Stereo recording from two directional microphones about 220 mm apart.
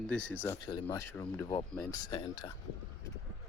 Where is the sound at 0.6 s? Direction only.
20° left (ahead or behind).